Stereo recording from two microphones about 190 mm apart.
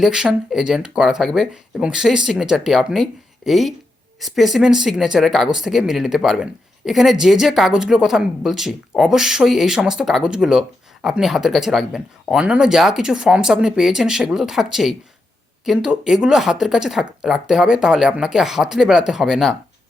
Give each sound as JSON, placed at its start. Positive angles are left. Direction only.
{"t": 0.0, "sound": "speech", "side_deg": -5}